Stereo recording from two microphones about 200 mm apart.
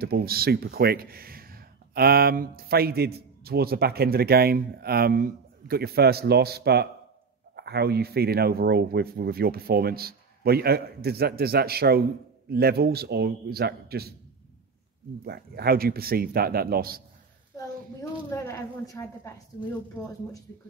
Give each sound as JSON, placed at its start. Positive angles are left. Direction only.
{"t": 0.0, "sound": "speech", "side_deg": -50}
{"t": 15.2, "sound": "speech", "side_deg": -50}
{"t": 18.3, "sound": "a woman's voice", "side_deg": 15}